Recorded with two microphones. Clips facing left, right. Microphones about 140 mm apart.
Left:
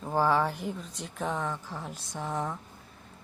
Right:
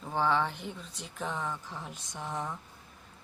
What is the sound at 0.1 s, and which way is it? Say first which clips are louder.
A woman's voice: left 3 dB; 5° left (ahead or behind).